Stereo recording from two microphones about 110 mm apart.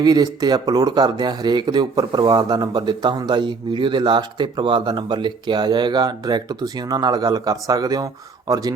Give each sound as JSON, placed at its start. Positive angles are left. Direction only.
{"t": 0.0, "sound": "speech", "side_deg": -35}